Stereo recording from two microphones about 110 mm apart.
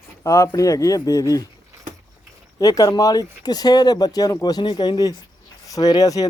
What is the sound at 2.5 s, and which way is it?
Speech, 35° left (ahead or behind).